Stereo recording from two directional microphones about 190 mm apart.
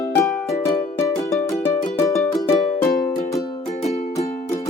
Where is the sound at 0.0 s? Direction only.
5° left (ahead or behind).